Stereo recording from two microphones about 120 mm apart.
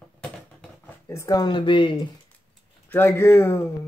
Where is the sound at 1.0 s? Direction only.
25° left (ahead or behind); by 2.0 s 45° left (ahead or behind).